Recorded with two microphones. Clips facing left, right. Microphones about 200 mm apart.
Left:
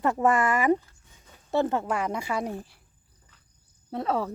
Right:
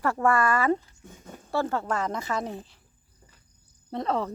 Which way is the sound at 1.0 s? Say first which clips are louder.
Right 12 dB; 50° right (ahead or behind).